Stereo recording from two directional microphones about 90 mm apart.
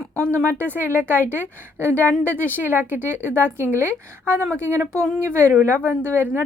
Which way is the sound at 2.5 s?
20° right (ahead or behind).